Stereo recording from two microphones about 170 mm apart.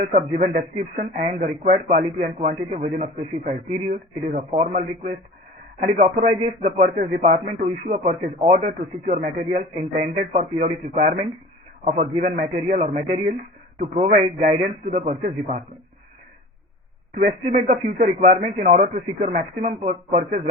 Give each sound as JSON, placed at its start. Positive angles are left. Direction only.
{"t": 0.0, "sound": "a man's voice", "side_deg": -45}
{"t": 17.2, "sound": "a man's voice", "side_deg": -50}